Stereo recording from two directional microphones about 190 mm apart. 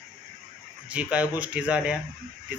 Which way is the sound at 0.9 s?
5° right (ahead or behind).